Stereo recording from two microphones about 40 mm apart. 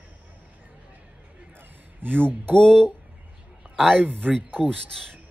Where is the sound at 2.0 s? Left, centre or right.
Right.